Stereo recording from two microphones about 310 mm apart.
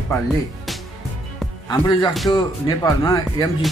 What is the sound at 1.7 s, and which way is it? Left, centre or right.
Speech, centre.